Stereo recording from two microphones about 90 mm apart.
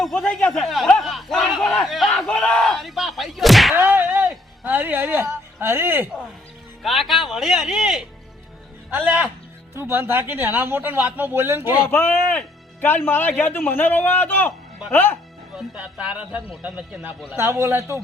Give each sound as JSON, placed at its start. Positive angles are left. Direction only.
{"t": 0.0, "sound": "speech", "side_deg": 0}
{"t": 0.6, "sound": "speech", "side_deg": 0}
{"t": 0.9, "sound": "battle cry", "side_deg": 0}
{"t": 3.8, "sound": "whip", "side_deg": -25}
{"t": 4.6, "sound": "speech", "side_deg": -20}
{"t": 6.8, "sound": "speech", "side_deg": 0}
{"t": 8.9, "sound": "speech", "side_deg": -15}
{"t": 9.8, "sound": "speech", "side_deg": -25}
{"t": 11.9, "sound": "a man's voice", "side_deg": 25}
{"t": 15.5, "sound": "speech", "side_deg": -10}
{"t": 17.3, "sound": "speech", "side_deg": -30}